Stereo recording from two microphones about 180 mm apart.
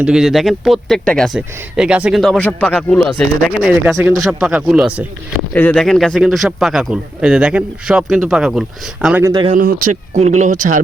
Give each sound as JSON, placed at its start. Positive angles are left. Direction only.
{"t": 0.0, "sound": "speech", "side_deg": -5}
{"t": 5.5, "sound": "speech", "side_deg": 5}
{"t": 9.2, "sound": "speech", "side_deg": -25}
{"t": 9.5, "sound": "speech", "side_deg": -50}
{"t": 10.2, "sound": "speech", "side_deg": -40}